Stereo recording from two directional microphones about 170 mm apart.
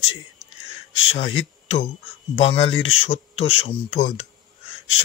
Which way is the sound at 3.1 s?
35° left (ahead or behind).